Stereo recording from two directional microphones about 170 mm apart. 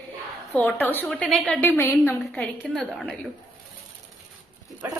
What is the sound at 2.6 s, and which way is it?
Speech, centre (ahead or behind).